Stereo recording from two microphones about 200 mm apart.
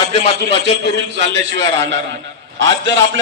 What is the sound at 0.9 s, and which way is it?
A man's voice, 65° right (ahead or behind).